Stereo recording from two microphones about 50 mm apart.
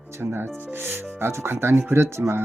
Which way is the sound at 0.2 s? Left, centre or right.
Right.